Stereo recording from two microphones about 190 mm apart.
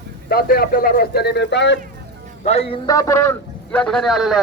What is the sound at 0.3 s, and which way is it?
Speech, 50° left (ahead or behind).